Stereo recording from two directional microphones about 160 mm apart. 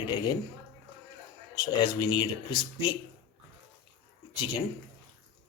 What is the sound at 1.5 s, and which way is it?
Speech, 25° left (ahead or behind).